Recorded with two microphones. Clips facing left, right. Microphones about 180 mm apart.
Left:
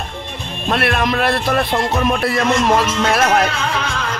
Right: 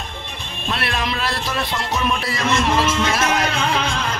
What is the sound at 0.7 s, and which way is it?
Speech, 55° left (ahead or behind).